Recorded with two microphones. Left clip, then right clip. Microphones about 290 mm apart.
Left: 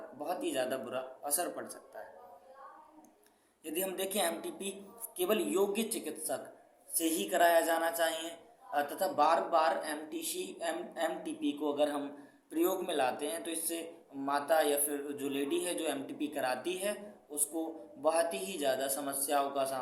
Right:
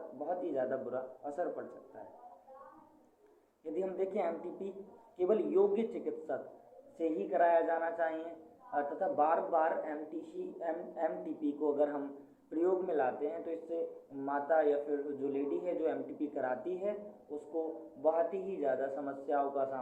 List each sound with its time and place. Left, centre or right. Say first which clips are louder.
0.3 s a man's voice: left 1 dB; left
3.6 s a man's voice: even; left
18.0 s a man's voice: left 1 dB; left